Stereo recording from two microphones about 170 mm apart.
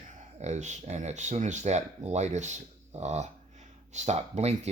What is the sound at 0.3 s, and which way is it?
Speech, 40° right (ahead or behind).